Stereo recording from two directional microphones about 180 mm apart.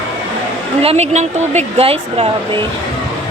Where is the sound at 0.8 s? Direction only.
35° right (ahead or behind).